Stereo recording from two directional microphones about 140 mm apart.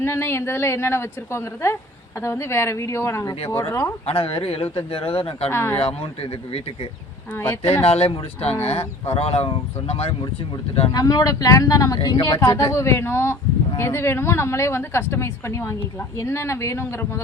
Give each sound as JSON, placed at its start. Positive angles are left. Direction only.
{"t": 0.0, "sound": "a woman's voice", "side_deg": 20}
{"t": 4.0, "sound": "speech", "side_deg": 45}
{"t": 5.5, "sound": "a woman's voice", "side_deg": 15}
{"t": 5.7, "sound": "speech", "side_deg": 45}
{"t": 7.3, "sound": "a woman's voice", "side_deg": 15}
{"t": 7.9, "sound": "speech", "side_deg": 45}
{"t": 10.9, "sound": "a woman's voice", "side_deg": 25}